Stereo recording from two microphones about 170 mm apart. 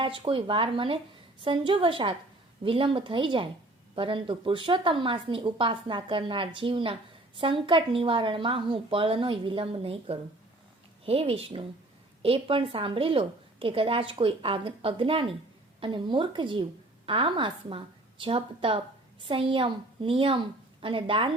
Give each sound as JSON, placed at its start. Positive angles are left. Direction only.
{"t": 0.0, "sound": "a woman's voice", "side_deg": -30}